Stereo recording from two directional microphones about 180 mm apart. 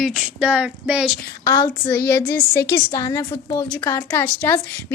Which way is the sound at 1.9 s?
10° left (ahead or behind).